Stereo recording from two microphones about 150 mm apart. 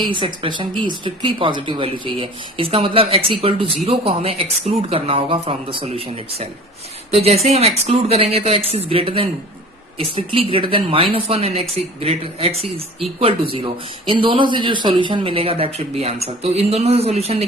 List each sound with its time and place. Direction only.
0.0 s speech: 30° right (ahead or behind)